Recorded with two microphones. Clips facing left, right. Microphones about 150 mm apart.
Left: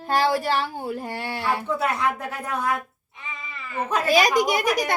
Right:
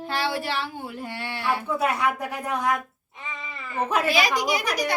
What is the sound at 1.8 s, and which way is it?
Speech, 10° right (ahead or behind).